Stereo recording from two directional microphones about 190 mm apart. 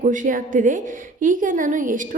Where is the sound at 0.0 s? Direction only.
45° right (ahead or behind).